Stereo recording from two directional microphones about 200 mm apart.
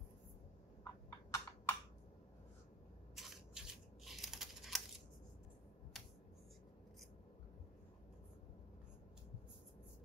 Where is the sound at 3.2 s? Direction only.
Centre (ahead or behind).